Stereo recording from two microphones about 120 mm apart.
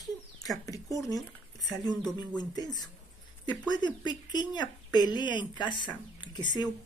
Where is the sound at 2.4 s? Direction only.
35° left (ahead or behind).